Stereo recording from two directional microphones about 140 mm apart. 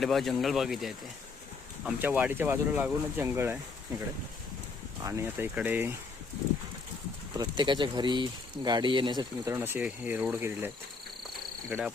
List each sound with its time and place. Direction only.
0.0 s speech: centre (ahead or behind)
1.8 s speech: 15° right (ahead or behind)
5.0 s speech: 20° right (ahead or behind)
7.3 s speech: 30° right (ahead or behind)
9.6 s speech: 15° right (ahead or behind)
11.7 s speech: 5° right (ahead or behind)